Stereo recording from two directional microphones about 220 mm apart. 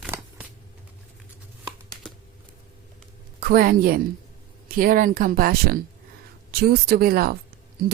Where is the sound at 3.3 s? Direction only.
40° right (ahead or behind).